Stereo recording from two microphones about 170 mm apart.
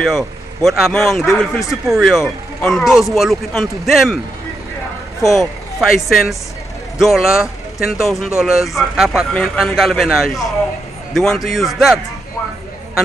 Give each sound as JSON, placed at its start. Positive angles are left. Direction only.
{"t": 0.0, "sound": "speech", "side_deg": 0}
{"t": 5.4, "sound": "speech", "side_deg": 0}